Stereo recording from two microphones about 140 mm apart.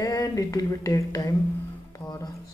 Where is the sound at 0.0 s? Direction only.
25° left (ahead or behind).